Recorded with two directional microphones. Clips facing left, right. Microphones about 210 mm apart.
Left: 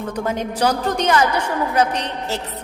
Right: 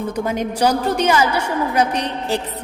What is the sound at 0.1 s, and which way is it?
A woman's voice, 10° right (ahead or behind).